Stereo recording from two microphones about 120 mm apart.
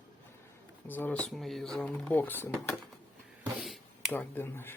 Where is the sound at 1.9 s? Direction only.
10° left (ahead or behind).